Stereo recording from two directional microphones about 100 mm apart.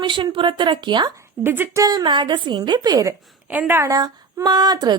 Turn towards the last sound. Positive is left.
turn(degrees=-45)  # may be behind; listen again after turning